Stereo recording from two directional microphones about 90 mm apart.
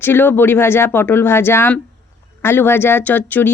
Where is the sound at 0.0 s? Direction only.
20° left (ahead or behind).